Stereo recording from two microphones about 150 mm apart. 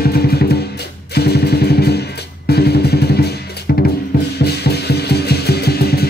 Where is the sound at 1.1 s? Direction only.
90° left.